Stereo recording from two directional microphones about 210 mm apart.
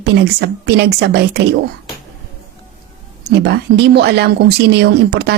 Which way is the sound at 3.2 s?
50° right (ahead or behind).